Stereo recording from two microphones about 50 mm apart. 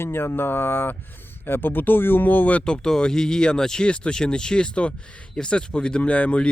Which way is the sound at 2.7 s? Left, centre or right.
Centre.